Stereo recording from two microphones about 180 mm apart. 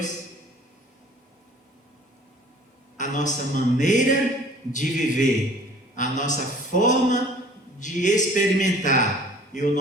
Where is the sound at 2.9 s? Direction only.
45° left (ahead or behind).